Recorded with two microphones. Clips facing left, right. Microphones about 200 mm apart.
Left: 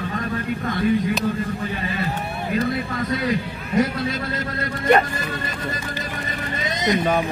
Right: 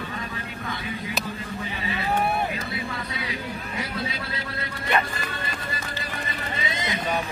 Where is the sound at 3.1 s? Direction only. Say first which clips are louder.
Left 9 dB; 45° left (ahead or behind).